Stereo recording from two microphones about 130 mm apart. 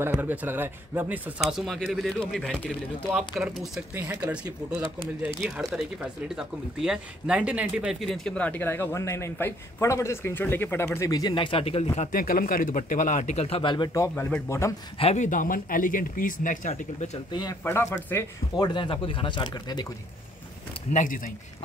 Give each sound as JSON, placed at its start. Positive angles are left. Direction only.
{"t": 0.0, "sound": "speech", "side_deg": -15}
{"t": 3.9, "sound": "speech", "side_deg": -15}
{"t": 5.0, "sound": "speech", "side_deg": 0}
{"t": 13.9, "sound": "speech", "side_deg": 20}
{"t": 15.0, "sound": "speech", "side_deg": 50}
{"t": 15.2, "sound": "speech", "side_deg": 90}
{"t": 17.3, "sound": "speech", "side_deg": 35}
{"t": 17.6, "sound": "speech", "side_deg": 20}
{"t": 18.6, "sound": "speech", "side_deg": 40}
{"t": 20.9, "sound": "speech", "side_deg": 85}